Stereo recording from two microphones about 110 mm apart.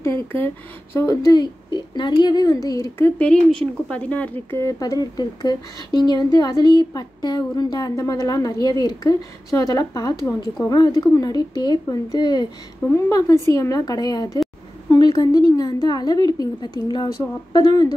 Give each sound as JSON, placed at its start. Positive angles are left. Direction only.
{"t": 0.0, "sound": "speech", "side_deg": 20}
{"t": 0.9, "sound": "speech", "side_deg": 30}
{"t": 3.2, "sound": "speech", "side_deg": 10}